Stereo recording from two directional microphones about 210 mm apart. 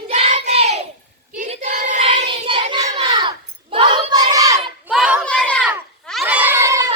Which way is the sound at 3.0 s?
20° right (ahead or behind).